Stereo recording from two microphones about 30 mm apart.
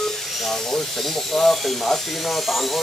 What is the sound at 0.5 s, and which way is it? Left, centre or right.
Speech, centre.